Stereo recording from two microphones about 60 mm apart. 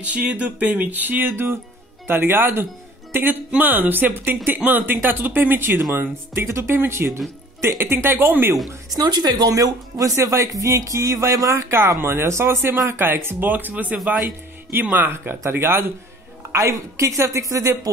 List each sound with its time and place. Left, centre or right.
0.0 s speech: right
1.3 s speech: right
8.9 s speech: right
16.5 s speech: right